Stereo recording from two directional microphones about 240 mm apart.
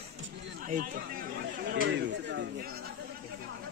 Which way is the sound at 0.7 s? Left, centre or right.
Right.